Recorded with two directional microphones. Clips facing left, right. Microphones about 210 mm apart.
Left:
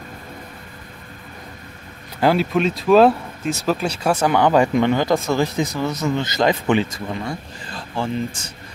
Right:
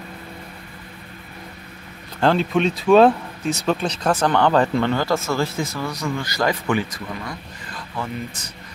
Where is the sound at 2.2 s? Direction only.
5° left (ahead or behind).